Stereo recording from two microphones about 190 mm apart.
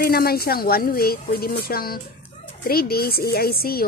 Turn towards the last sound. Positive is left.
turn(degrees=50)  # may be behind; listen again after turning